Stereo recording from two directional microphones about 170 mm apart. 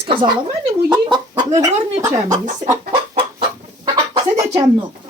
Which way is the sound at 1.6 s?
20° right (ahead or behind).